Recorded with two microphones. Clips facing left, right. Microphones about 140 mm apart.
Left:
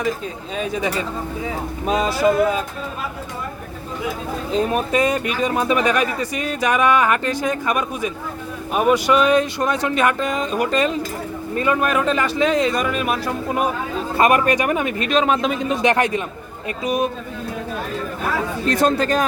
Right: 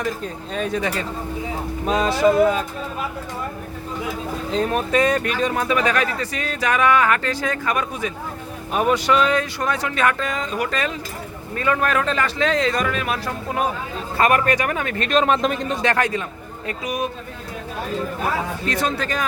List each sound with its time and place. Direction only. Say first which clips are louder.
0.5 s a man's voice: left 1 dB; 5° left (ahead or behind)
4.5 s speech: left 1 dB; 10° left (ahead or behind)
15.1 s a man's voice: even; centre (ahead or behind)
15.8 s speech: left 3 dB; 20° left (ahead or behind)
18.7 s speech: left 7 dB; 40° left (ahead or behind)